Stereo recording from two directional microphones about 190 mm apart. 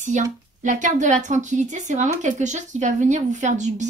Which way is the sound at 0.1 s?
40° right (ahead or behind).